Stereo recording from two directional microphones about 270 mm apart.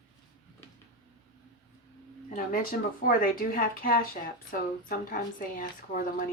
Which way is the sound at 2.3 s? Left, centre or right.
Left.